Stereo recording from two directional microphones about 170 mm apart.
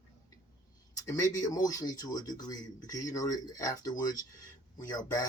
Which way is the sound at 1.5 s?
20° left (ahead or behind).